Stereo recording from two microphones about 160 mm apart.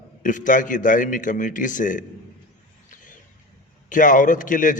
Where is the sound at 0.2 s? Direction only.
55° left (ahead or behind).